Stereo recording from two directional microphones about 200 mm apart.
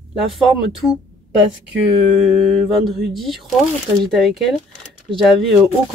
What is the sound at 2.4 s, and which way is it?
Speech, centre (ahead or behind).